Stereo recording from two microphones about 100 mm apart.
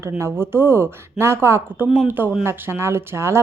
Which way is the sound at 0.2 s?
25° right (ahead or behind).